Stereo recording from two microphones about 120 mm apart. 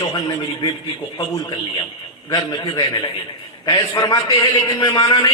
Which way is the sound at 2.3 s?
35° left (ahead or behind).